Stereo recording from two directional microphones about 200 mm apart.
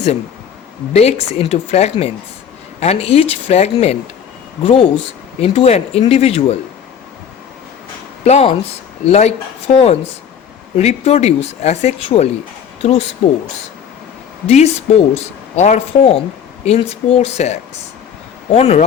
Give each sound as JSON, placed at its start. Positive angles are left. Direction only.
{"t": 0.9, "sound": "speech", "side_deg": 30}
{"t": 8.2, "sound": "speech", "side_deg": 30}
{"t": 14.4, "sound": "speech", "side_deg": 35}